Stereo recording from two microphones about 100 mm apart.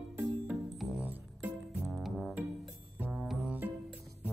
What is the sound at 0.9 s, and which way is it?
Music, 15° right (ahead or behind).